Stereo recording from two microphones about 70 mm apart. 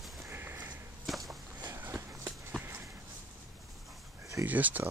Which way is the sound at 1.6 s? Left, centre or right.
Right.